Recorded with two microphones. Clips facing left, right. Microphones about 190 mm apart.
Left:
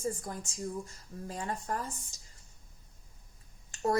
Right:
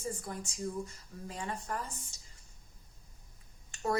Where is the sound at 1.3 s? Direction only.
40° left (ahead or behind).